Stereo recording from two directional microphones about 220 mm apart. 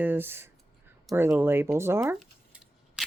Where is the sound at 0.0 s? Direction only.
10° right (ahead or behind).